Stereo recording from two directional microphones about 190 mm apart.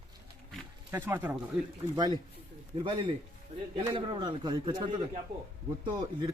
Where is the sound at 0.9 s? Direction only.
10° right (ahead or behind).